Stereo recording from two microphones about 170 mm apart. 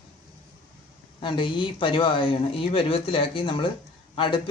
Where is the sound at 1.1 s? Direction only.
30° left (ahead or behind).